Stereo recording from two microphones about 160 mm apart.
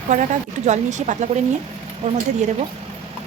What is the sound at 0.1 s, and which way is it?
Speech, 45° right (ahead or behind).